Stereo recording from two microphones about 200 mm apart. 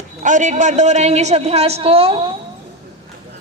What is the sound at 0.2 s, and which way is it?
A woman's voice, 40° right (ahead or behind).